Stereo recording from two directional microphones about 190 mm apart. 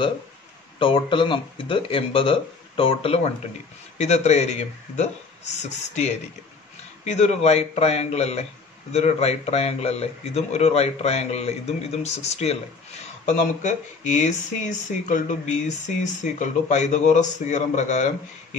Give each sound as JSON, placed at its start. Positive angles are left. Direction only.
{"t": 0.7, "sound": "speech", "side_deg": 25}